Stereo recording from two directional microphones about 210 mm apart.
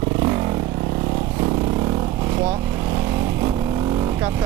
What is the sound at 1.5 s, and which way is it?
Vehicle, 25° right (ahead or behind).